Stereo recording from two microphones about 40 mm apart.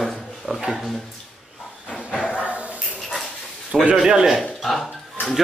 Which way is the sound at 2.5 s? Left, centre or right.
Right.